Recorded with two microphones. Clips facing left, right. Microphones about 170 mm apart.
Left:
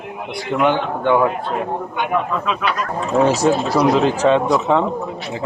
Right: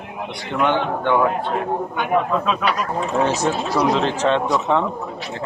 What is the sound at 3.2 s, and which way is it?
Speech, 10° left (ahead or behind).